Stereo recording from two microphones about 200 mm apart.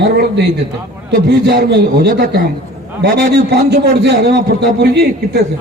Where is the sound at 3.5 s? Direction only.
55° right (ahead or behind).